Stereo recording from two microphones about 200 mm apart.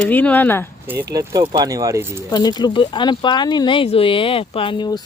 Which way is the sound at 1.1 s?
20° right (ahead or behind).